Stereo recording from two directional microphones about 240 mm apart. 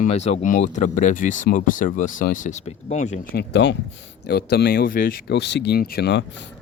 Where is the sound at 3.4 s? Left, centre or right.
Left.